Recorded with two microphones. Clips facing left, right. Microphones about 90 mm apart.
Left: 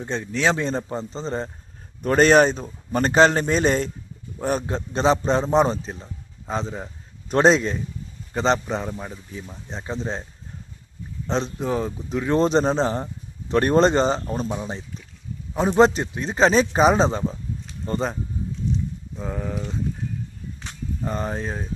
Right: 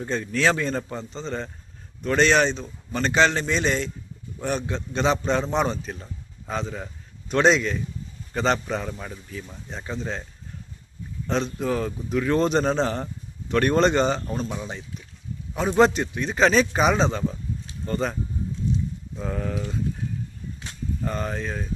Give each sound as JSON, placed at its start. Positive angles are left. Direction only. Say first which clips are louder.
{"t": 0.0, "sound": "a man's voice", "louder": "even", "side_deg": 20}
{"t": 11.3, "sound": "a man's voice", "louder": "left 1 dB", "side_deg": 30}
{"t": 19.1, "sound": "a man's voice", "louder": "even", "side_deg": 10}
{"t": 21.0, "sound": "a man's voice", "louder": "left 2 dB", "side_deg": 20}